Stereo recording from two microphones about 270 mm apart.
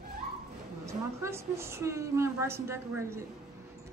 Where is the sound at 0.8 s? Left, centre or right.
Centre.